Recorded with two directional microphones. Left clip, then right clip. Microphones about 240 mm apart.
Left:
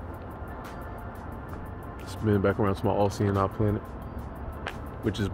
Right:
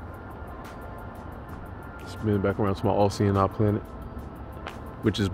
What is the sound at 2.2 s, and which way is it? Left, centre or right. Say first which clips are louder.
Speech: left 1 dB; centre.